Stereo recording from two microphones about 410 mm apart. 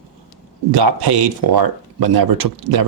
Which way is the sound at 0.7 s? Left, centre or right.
Right.